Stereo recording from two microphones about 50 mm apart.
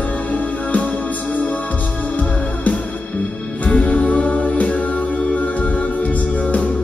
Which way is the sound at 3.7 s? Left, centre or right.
Left.